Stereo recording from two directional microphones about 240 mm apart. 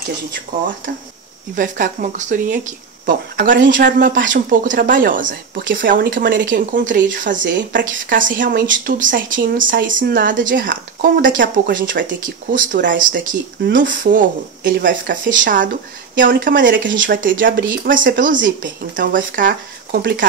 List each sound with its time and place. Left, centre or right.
1.5 s speech: right